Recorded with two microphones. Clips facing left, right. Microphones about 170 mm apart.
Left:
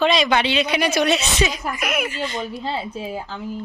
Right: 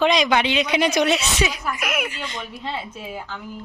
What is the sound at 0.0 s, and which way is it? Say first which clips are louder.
Speech: even; 15° right (ahead or behind).